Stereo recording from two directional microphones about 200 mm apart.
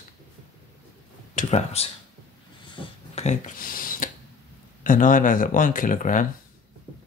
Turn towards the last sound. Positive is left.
turn(degrees=40)  # may be behind; listen again after turning